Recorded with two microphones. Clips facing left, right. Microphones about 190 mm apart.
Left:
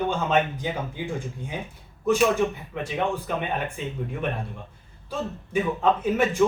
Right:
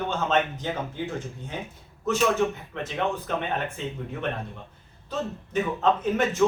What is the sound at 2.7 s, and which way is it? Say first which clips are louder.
Speech: left 2 dB; 10° left (ahead or behind).